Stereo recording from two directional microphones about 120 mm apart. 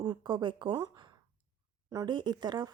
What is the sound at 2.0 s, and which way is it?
Speech, 40° right (ahead or behind).